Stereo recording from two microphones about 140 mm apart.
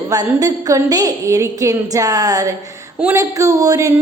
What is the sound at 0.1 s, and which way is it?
Speech, 25° right (ahead or behind).